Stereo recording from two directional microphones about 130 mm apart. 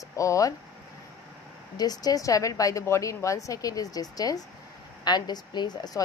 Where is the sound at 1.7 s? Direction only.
30° left (ahead or behind).